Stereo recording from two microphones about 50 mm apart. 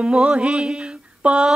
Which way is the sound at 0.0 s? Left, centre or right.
Centre.